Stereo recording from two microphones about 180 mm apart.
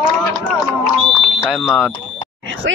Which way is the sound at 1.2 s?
Centre (ahead or behind).